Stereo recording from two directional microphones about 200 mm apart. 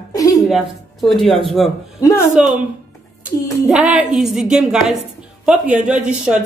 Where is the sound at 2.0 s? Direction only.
15° left (ahead or behind).